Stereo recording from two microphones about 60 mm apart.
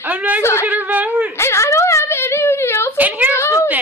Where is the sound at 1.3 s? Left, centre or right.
Left.